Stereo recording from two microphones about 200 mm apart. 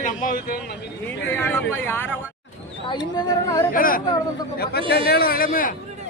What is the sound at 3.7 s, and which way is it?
A man's voice, 45° left (ahead or behind).